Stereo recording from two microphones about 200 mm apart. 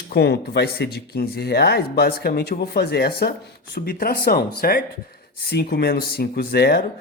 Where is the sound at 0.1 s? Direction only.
55° left (ahead or behind).